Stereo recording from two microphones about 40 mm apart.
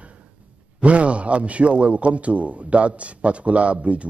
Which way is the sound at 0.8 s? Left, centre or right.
Right.